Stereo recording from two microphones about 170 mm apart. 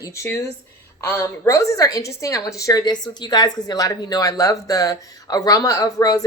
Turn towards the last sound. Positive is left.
turn(degrees=20)  # may be behind; listen again after turning